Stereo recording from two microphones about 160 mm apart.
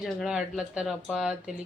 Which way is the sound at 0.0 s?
5° right (ahead or behind).